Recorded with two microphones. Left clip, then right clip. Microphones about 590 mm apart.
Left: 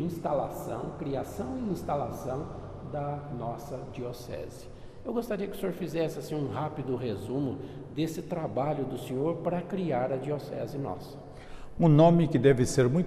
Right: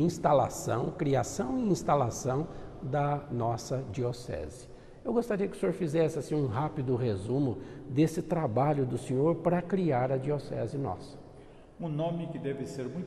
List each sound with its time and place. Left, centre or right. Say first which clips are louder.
0.0 s a man's voice: right 5 dB; right
11.8 s a man's voice: left 13 dB; left